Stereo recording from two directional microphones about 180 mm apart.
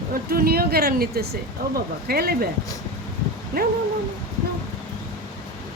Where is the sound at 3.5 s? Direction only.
55° right (ahead or behind).